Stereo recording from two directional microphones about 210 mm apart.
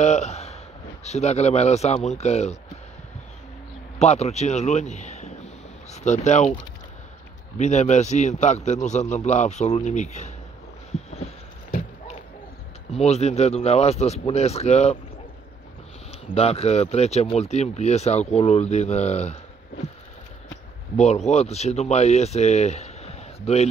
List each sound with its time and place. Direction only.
0.0 s speech: 30° left (ahead or behind)
4.0 s speech: 30° left (ahead or behind)
7.5 s speech: 35° left (ahead or behind)
12.9 s speech: 30° left (ahead or behind)
16.3 s speech: 30° left (ahead or behind)
20.9 s speech: 30° left (ahead or behind)